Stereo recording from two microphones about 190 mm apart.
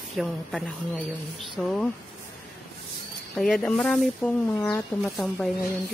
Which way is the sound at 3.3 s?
5° left (ahead or behind).